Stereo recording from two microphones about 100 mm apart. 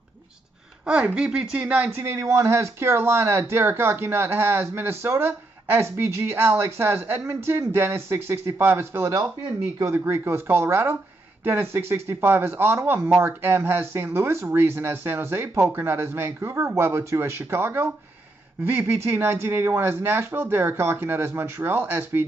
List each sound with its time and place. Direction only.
0.8 s speech: 10° right (ahead or behind)